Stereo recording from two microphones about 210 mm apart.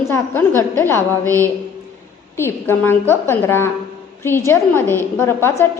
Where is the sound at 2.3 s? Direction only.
10° left (ahead or behind).